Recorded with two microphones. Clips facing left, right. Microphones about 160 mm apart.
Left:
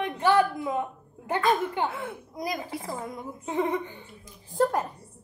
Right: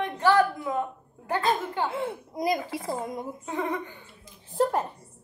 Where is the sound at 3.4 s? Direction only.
20° left (ahead or behind).